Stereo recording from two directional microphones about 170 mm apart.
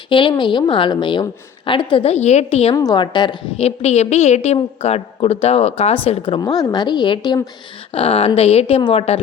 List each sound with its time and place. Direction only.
0.1 s a woman's voice: 30° left (ahead or behind)
2.7 s a woman's voice: 25° left (ahead or behind)